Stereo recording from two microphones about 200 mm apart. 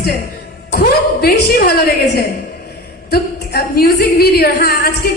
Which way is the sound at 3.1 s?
50° left (ahead or behind).